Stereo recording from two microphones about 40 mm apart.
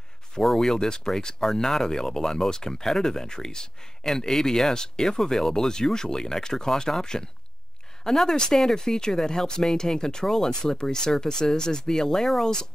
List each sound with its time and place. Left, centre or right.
0.4 s speech: centre